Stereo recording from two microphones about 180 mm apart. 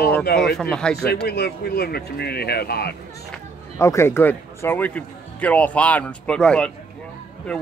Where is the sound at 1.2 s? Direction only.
65° left (ahead or behind).